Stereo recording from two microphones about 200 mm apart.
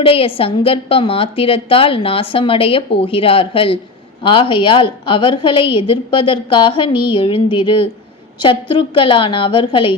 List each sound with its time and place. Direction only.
0.0 s a woman's voice: 30° left (ahead or behind)